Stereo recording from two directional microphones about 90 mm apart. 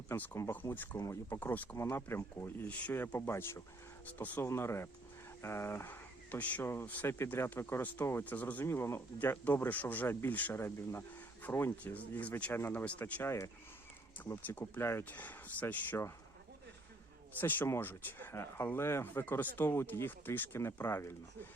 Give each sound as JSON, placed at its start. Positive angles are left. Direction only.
{"t": 0.1, "sound": "speech", "side_deg": 25}
{"t": 2.6, "sound": "speech", "side_deg": 15}
{"t": 4.4, "sound": "speech", "side_deg": 30}
{"t": 8.6, "sound": "speech", "side_deg": 30}
{"t": 13.2, "sound": "speech", "side_deg": 30}
{"t": 17.4, "sound": "speech", "side_deg": 20}